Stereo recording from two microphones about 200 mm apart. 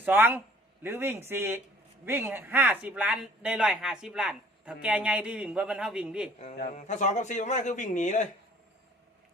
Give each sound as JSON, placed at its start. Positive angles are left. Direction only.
{"t": 0.0, "sound": "speech", "side_deg": -10}
{"t": 6.7, "sound": "a man's voice", "side_deg": 35}